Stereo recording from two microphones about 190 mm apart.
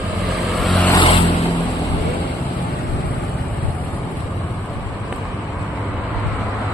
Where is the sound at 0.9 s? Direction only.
25° left (ahead or behind).